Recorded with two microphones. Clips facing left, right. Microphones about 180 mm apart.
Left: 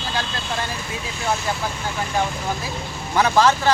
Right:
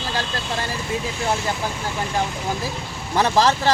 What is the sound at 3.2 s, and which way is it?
Speech, 35° right (ahead or behind).